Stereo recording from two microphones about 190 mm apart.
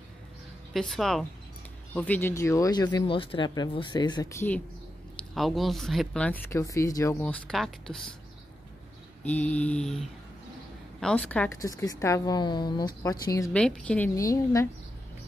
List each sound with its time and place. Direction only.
0.7 s speech: centre (ahead or behind)
5.3 s speech: centre (ahead or behind)
9.2 s a woman's voice: 10° left (ahead or behind)
13.5 s a woman's voice: 5° left (ahead or behind)